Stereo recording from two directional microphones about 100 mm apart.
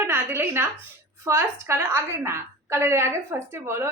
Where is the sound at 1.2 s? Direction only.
25° right (ahead or behind).